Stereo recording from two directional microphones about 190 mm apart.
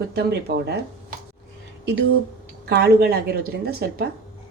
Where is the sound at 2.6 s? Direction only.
55° right (ahead or behind).